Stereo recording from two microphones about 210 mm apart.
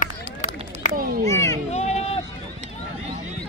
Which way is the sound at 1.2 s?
15° left (ahead or behind).